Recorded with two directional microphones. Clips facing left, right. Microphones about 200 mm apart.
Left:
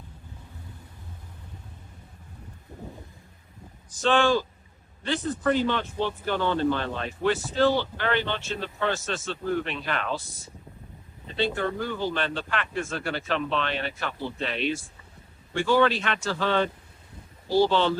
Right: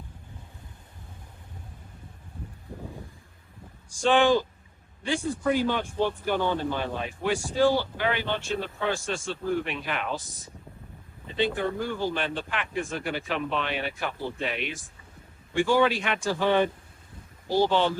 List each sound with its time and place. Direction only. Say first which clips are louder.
3.9 s speech: right 1 dB; 15° right (ahead or behind)